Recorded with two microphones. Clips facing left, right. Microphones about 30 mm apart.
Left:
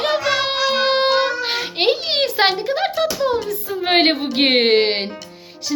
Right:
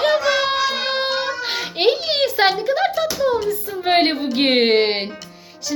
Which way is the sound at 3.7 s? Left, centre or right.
Left.